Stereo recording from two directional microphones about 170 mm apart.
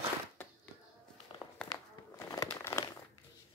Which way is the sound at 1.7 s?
20° left (ahead or behind).